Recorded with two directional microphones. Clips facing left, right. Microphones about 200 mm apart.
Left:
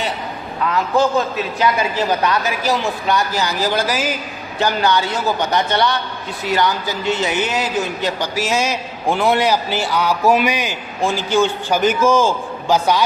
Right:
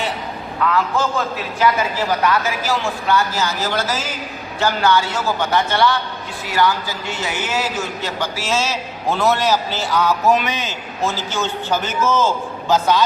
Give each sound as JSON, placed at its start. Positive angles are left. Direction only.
{"t": 0.6, "sound": "a man's voice", "side_deg": 20}